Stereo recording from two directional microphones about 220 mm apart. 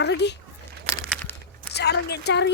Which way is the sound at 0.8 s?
5° left (ahead or behind).